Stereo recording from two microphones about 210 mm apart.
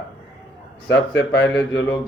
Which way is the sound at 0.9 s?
60° left (ahead or behind).